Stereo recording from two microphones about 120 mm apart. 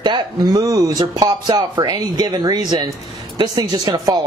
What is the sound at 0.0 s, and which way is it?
A man's voice, 35° right (ahead or behind).